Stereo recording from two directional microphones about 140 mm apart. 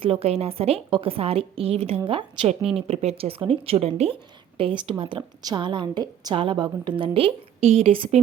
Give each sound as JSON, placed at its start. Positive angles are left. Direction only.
{"t": 0.0, "sound": "a woman's voice", "side_deg": -45}